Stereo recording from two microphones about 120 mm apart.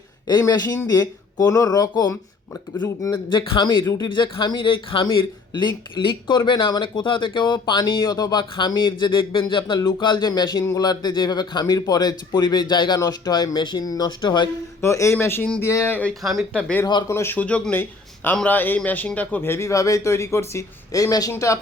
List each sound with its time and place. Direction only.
0.9 s speech: 35° left (ahead or behind)
3.8 s a man's voice: 30° left (ahead or behind)
4.1 s speech: 40° left (ahead or behind)
10.6 s a man's voice: 20° left (ahead or behind)
10.8 s speech: 35° left (ahead or behind)
14.8 s a man's voice: 25° left (ahead or behind); by 16.8 s 10° left (ahead or behind)
17.1 s a man's voice: 20° left (ahead or behind)